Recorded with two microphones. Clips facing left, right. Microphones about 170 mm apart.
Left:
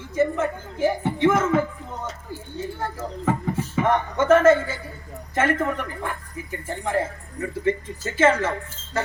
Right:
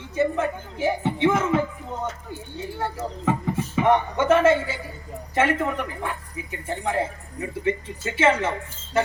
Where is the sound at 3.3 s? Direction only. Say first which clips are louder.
Even; 15° right (ahead or behind).